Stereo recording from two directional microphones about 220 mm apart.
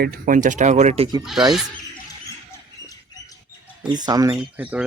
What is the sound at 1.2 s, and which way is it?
Speech, centre (ahead or behind).